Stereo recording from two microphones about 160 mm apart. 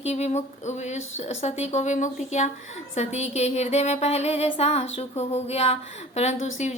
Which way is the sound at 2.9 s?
45° left (ahead or behind).